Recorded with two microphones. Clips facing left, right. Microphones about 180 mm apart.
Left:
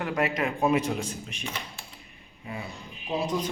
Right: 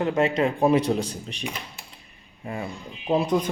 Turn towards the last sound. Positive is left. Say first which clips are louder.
# right 6 dB
turn(degrees=-55)  # may be behind; listen again after turning